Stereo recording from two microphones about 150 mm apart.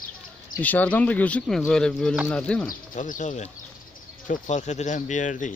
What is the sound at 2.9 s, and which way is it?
Speech, 60° left (ahead or behind).